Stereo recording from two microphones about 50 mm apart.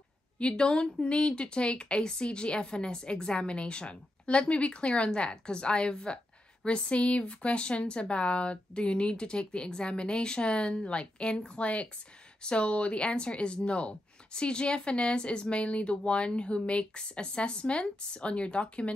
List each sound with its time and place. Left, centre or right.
0.4 s speech: centre